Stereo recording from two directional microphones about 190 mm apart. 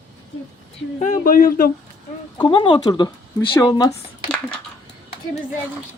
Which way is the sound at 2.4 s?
25° left (ahead or behind).